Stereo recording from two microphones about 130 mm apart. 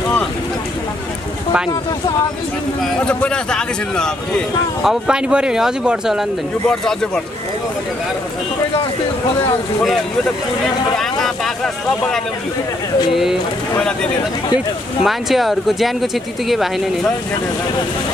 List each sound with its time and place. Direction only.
1.7 s speech: 30° left (ahead or behind)
2.8 s a man's voice: 10° left (ahead or behind)
4.8 s speech: 5° right (ahead or behind)
11.0 s speech: 5° left (ahead or behind)
15.0 s speech: centre (ahead or behind)